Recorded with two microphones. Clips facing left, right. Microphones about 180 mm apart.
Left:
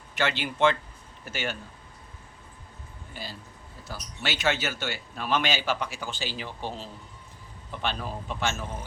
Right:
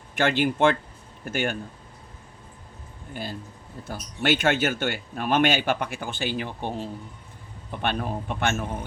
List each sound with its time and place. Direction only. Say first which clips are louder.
0.2 s speech: right 4 dB; 50° right (ahead or behind)
3.1 s speech: right 7 dB; 50° right (ahead or behind)